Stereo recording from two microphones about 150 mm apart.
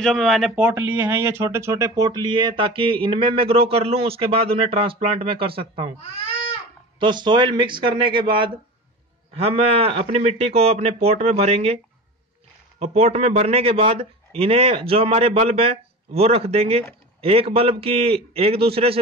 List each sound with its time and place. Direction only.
0.0 s speech: centre (ahead or behind); by 5.9 s 40° right (ahead or behind)
7.0 s a man's voice: 30° right (ahead or behind)